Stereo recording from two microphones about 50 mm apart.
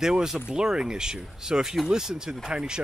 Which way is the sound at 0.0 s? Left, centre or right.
Centre.